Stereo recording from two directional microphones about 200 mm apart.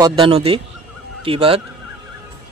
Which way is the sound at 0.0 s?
30° right (ahead or behind).